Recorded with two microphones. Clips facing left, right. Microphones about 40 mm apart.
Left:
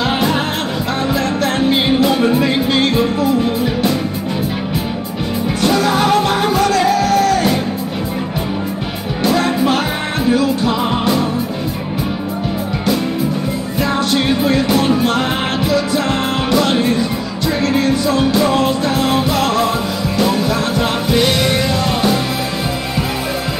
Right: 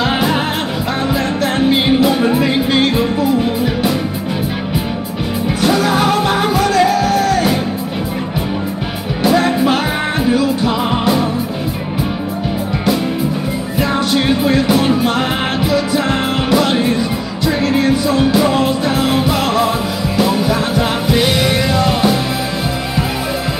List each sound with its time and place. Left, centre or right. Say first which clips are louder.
0.0 s music: right 1 dB; centre
5.6 s music: even; centre
9.2 s music: right 2 dB; centre
13.7 s music: right 1 dB; centre